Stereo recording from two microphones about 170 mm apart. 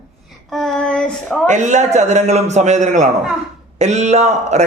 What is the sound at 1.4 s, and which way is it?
A man's voice, 45° right (ahead or behind).